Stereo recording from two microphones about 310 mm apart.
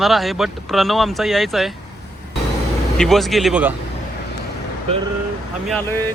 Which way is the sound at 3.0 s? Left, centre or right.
Centre.